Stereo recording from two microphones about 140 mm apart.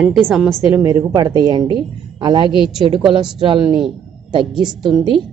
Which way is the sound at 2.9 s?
35° right (ahead or behind).